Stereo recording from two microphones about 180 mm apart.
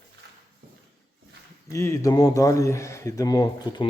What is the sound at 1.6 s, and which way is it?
A man's voice, 15° left (ahead or behind).